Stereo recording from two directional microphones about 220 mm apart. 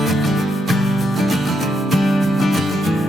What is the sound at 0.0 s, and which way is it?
Music, centre (ahead or behind).